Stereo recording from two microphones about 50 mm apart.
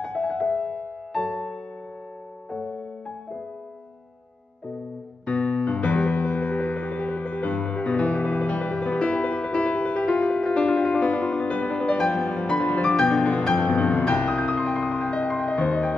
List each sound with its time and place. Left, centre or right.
0.0 s music: centre
5.2 s music: left
12.9 s music: centre